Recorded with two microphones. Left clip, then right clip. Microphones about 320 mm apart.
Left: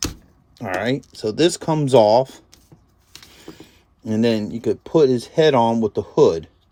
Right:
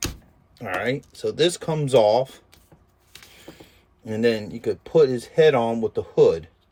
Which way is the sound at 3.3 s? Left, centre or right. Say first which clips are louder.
Left 5 dB; centre.